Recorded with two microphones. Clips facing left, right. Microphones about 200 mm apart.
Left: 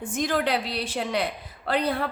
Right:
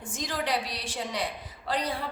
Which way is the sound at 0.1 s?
60° left (ahead or behind).